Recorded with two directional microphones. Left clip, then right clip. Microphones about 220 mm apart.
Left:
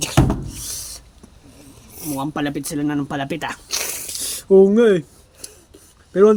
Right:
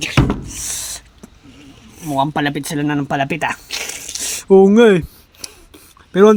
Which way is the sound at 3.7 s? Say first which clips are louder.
Right 1 dB; 10° left (ahead or behind).